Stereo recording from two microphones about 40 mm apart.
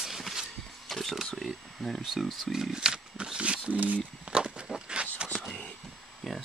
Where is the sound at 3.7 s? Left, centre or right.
Right.